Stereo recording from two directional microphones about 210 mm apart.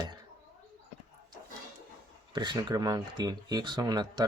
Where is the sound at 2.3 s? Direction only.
20° right (ahead or behind).